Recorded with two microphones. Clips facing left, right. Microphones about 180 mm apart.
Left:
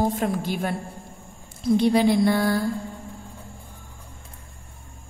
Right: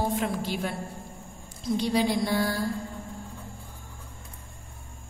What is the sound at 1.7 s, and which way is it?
Mantra, 60° left (ahead or behind).